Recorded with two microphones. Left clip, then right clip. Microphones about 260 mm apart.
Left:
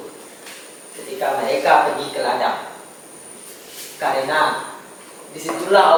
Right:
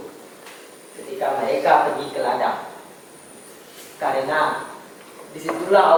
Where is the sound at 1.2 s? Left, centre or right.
Centre.